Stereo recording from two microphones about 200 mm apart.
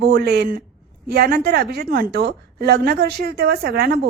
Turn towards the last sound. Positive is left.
turn(degrees=-50)  # may be behind; listen again after turning